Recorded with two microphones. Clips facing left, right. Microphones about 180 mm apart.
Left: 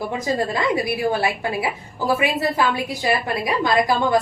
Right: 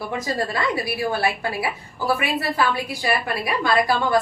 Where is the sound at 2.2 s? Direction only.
20° left (ahead or behind).